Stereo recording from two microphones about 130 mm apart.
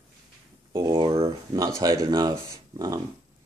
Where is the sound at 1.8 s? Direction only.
30° right (ahead or behind).